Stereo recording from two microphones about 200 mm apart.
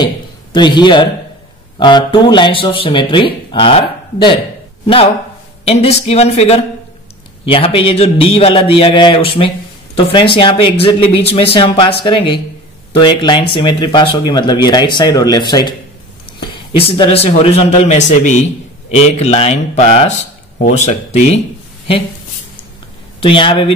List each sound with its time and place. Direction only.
0.0 s a man's voice: 25° left (ahead or behind)
5.7 s a man's voice: 30° left (ahead or behind)
23.2 s speech: 25° left (ahead or behind)